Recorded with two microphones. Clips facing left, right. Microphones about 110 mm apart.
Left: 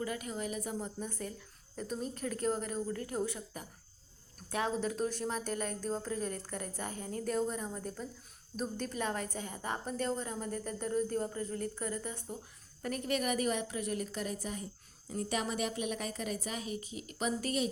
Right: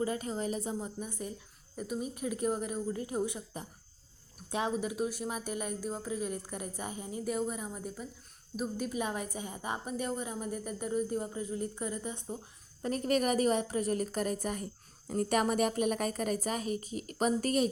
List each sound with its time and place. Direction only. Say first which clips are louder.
0.0 s a woman's voice: right 4 dB; 30° right (ahead or behind)
0.7 s a woman's voice: right 1 dB; 15° right (ahead or behind)
12.8 s a woman's voice: right 4 dB; 35° right (ahead or behind)